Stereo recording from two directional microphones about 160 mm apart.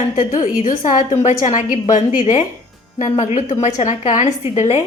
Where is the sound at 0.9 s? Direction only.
50° left (ahead or behind).